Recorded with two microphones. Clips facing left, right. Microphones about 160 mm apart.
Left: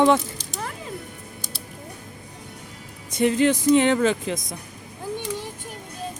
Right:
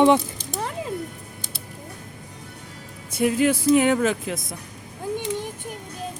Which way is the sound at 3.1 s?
5° right (ahead or behind).